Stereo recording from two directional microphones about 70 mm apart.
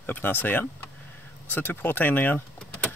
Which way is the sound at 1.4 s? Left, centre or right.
Left.